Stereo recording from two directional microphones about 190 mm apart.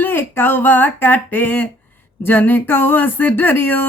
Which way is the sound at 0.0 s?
10° left (ahead or behind).